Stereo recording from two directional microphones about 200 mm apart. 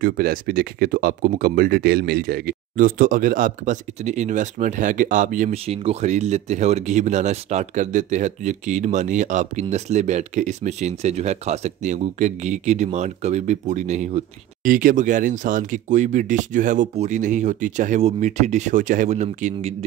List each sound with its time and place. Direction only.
0.0 s speech: 45° right (ahead or behind)